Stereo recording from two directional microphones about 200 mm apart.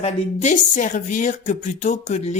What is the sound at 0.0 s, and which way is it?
A woman's voice, 35° left (ahead or behind).